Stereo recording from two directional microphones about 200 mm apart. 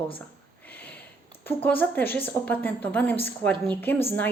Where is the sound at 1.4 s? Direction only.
10° left (ahead or behind).